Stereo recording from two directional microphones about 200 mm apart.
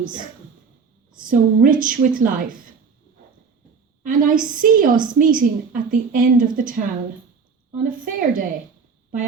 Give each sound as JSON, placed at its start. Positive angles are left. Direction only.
{"t": 1.1, "sound": "a woman's voice", "side_deg": -45}
{"t": 4.0, "sound": "a woman's voice", "side_deg": -45}
{"t": 7.9, "sound": "a woman's voice", "side_deg": -45}